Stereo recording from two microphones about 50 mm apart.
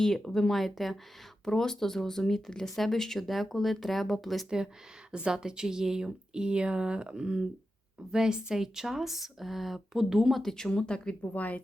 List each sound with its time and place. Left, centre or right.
0.0 s speech: centre
4.4 s speech: centre
10.4 s speech: centre
11.2 s speech: left